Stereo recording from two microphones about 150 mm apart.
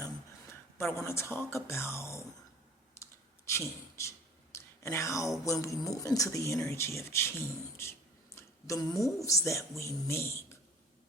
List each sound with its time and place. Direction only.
0.8 s speech: 15° left (ahead or behind)
3.4 s speech: 20° left (ahead or behind)
4.5 s a sound: 20° left (ahead or behind)
5.5 s speech: 20° left (ahead or behind)
8.4 s a sound: 20° left (ahead or behind)
9.2 s speech: 20° left (ahead or behind)